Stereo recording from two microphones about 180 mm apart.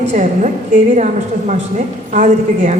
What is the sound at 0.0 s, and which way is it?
A woman's voice, 40° right (ahead or behind).